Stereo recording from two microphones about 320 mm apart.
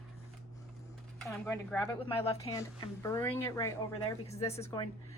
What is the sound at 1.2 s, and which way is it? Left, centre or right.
A woman's voice, centre.